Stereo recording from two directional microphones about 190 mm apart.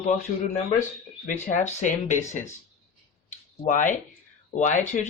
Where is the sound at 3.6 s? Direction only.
40° left (ahead or behind).